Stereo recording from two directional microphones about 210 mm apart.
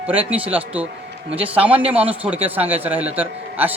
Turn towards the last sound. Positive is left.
turn(degrees=-10)  # may be behind; listen again after turning